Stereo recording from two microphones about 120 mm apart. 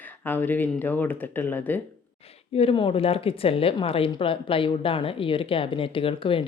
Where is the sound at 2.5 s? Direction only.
50° left (ahead or behind).